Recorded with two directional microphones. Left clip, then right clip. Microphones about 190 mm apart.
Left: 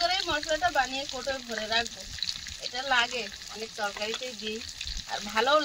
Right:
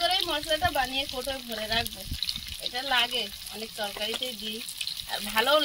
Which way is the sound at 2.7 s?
Centre (ahead or behind).